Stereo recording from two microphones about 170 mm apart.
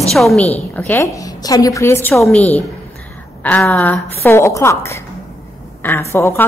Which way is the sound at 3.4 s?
10° left (ahead or behind).